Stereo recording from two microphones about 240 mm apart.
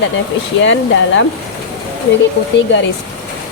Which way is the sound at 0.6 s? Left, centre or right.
Left.